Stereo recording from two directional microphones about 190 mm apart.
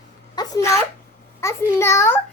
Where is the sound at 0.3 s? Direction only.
20° left (ahead or behind).